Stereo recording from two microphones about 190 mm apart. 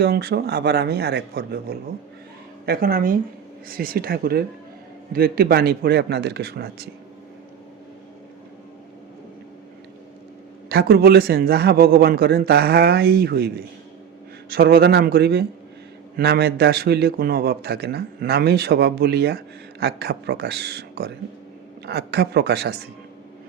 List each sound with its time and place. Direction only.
0.0 s a man's voice: 55° right (ahead or behind)
10.7 s a man's voice: 55° right (ahead or behind)
14.5 s a man's voice: 55° right (ahead or behind)